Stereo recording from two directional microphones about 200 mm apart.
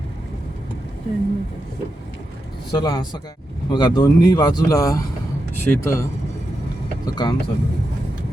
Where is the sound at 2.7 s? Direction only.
20° left (ahead or behind).